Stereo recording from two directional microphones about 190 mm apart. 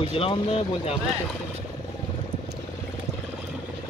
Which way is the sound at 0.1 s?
30° left (ahead or behind).